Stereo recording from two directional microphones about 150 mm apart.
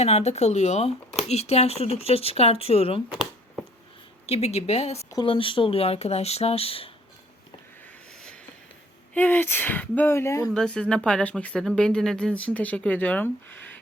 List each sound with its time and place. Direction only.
0.0 s speech: 45° left (ahead or behind)
4.3 s speech: 45° left (ahead or behind)
9.1 s speech: 10° left (ahead or behind)
10.5 s speech: 5° left (ahead or behind)